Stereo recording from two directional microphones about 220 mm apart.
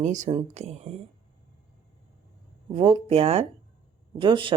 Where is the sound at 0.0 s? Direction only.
35° right (ahead or behind).